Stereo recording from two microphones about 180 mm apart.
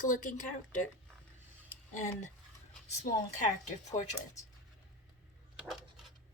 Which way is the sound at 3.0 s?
40° left (ahead or behind).